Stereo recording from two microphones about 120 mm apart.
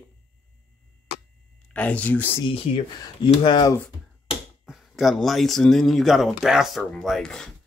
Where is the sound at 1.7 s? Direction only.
10° left (ahead or behind).